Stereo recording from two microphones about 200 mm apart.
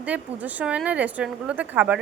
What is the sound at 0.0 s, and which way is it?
Speech, 10° right (ahead or behind).